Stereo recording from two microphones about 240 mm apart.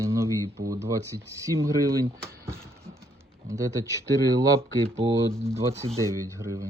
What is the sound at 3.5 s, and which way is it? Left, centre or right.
Speech, centre.